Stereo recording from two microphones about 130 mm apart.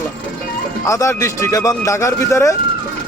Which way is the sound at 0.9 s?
25° left (ahead or behind).